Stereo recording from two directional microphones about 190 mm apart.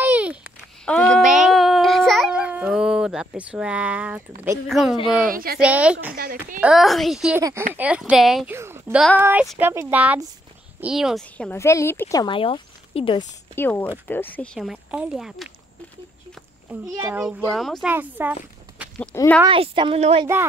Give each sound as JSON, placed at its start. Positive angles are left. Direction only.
{"t": 0.0, "sound": "a sound", "side_deg": -10}
{"t": 0.8, "sound": "babbling", "side_deg": 5}
{"t": 4.6, "sound": "speech", "side_deg": 0}
{"t": 5.2, "sound": "speech", "side_deg": -50}
{"t": 5.6, "sound": "speech", "side_deg": -5}
{"t": 8.5, "sound": "a sound", "side_deg": -15}
{"t": 9.2, "sound": "speech", "side_deg": -10}
{"t": 13.6, "sound": "speech", "side_deg": 10}
{"t": 17.0, "sound": "speech", "side_deg": -5}
{"t": 17.9, "sound": "speech", "side_deg": -10}
{"t": 18.8, "sound": "a sound", "side_deg": -5}
{"t": 19.1, "sound": "speech", "side_deg": 10}
{"t": 19.4, "sound": "a woman's voice", "side_deg": -25}